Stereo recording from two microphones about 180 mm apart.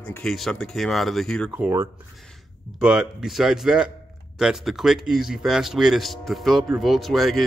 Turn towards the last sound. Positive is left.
turn(degrees=0)  # may be behind; listen again after turning